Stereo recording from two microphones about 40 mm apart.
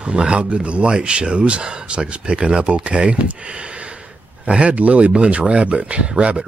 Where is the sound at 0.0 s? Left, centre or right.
Right.